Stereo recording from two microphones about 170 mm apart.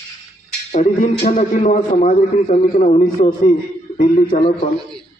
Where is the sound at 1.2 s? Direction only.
50° left (ahead or behind).